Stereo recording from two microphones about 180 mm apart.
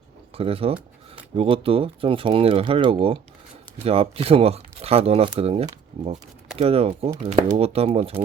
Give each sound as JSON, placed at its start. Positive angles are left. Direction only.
{"t": 0.3, "sound": "speech", "side_deg": -30}